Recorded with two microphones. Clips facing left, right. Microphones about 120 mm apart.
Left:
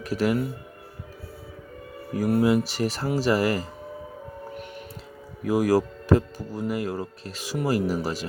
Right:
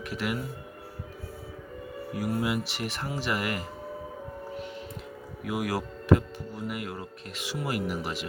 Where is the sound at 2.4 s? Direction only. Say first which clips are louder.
Left 8 dB; 35° left (ahead or behind).